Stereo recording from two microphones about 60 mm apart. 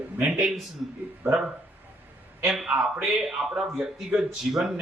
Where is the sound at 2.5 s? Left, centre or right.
Centre.